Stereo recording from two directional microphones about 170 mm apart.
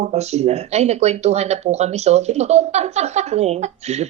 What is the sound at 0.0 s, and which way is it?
Speech, 40° right (ahead or behind).